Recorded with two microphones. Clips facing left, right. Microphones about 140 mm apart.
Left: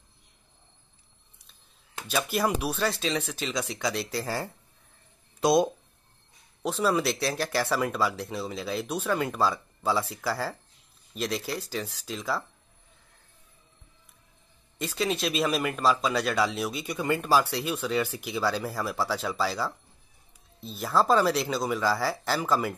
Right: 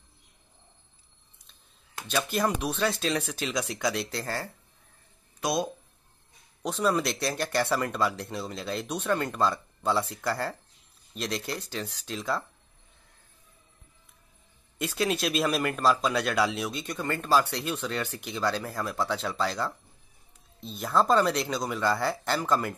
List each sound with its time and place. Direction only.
2.0 s speech: 5° left (ahead or behind)
5.4 s speech: 25° left (ahead or behind)
6.6 s speech: centre (ahead or behind)
14.8 s speech: centre (ahead or behind)